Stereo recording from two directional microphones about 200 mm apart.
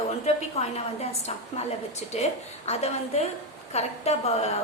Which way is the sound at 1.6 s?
35° left (ahead or behind).